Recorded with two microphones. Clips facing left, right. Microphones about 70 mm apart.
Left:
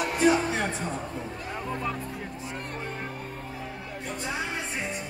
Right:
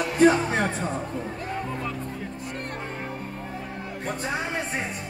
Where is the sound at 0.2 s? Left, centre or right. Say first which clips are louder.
Right 5 dB; right.